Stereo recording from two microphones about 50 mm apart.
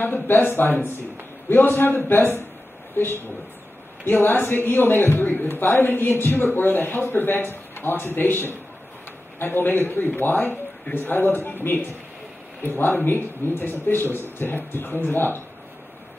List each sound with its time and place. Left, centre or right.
0.0 s a man's voice: left